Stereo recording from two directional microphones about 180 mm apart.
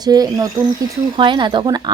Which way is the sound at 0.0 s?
20° right (ahead or behind).